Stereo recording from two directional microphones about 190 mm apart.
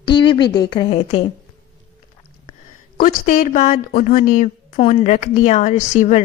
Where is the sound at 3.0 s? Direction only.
45° left (ahead or behind).